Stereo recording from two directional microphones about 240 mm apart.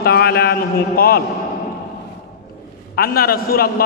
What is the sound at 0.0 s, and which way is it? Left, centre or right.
A man's voice, left.